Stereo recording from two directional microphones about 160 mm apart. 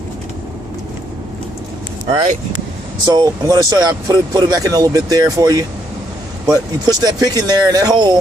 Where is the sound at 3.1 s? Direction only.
25° right (ahead or behind).